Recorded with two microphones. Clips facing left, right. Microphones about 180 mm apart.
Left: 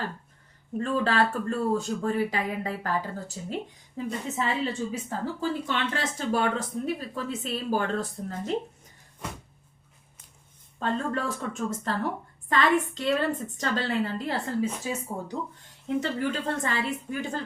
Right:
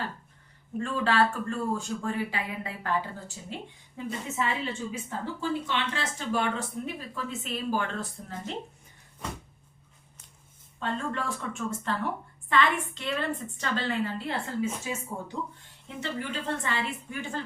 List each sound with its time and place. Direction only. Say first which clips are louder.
0.8 s a woman's voice: left 1 dB; 40° left (ahead or behind)
10.8 s a woman's voice: left 3 dB; 40° left (ahead or behind)